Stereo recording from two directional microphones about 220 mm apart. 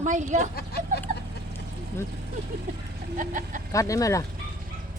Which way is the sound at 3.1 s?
35° right (ahead or behind).